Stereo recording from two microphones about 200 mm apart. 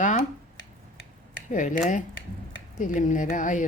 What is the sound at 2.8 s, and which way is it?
Speech, 40° left (ahead or behind).